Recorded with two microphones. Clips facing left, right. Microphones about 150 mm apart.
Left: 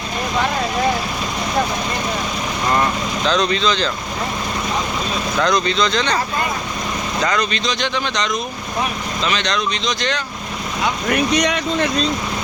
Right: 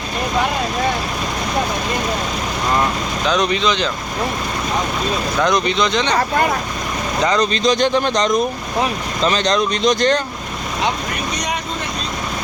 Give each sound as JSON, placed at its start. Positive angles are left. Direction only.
{"t": 3.2, "sound": "speech", "side_deg": -15}
{"t": 5.5, "sound": "speech", "side_deg": -20}
{"t": 7.5, "sound": "speech", "side_deg": -50}
{"t": 11.3, "sound": "speech", "side_deg": 75}